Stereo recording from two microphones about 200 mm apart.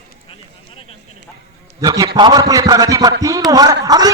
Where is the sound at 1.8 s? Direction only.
15° right (ahead or behind).